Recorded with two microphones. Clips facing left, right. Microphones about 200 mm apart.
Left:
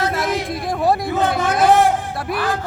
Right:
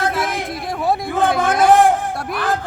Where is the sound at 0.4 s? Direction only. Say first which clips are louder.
Left 2 dB; centre (ahead or behind).